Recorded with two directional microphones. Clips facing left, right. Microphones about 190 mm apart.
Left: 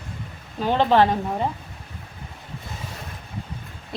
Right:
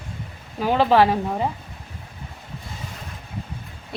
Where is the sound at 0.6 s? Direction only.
5° right (ahead or behind).